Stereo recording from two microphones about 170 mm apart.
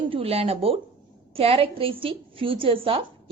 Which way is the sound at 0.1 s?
35° right (ahead or behind).